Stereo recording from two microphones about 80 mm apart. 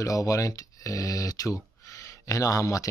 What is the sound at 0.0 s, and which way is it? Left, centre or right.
Speech, left.